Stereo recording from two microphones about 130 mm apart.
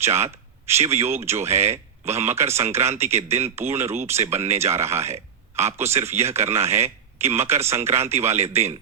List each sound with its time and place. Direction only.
0.0 s speech: 20° right (ahead or behind)